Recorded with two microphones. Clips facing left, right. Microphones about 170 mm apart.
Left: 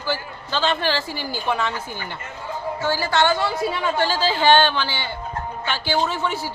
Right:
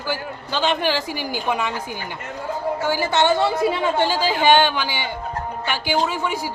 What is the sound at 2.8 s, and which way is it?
A woman's voice, 20° right (ahead or behind).